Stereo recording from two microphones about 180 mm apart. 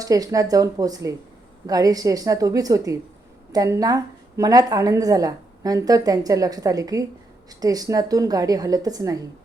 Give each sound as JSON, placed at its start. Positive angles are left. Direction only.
{"t": 0.0, "sound": "a woman's voice", "side_deg": -20}